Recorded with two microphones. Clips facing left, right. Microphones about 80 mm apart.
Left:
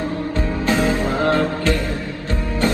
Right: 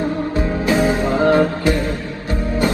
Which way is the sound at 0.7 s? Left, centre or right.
Centre.